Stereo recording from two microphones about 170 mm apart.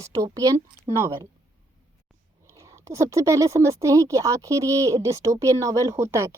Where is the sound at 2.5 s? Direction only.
20° right (ahead or behind).